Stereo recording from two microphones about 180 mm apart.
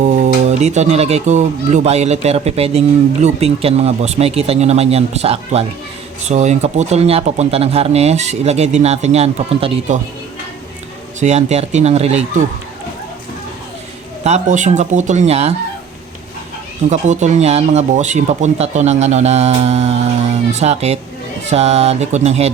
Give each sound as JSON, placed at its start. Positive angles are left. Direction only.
{"t": 0.0, "sound": "speech", "side_deg": -40}
{"t": 11.2, "sound": "speech", "side_deg": -40}
{"t": 14.3, "sound": "speech", "side_deg": -40}
{"t": 16.9, "sound": "speech", "side_deg": -40}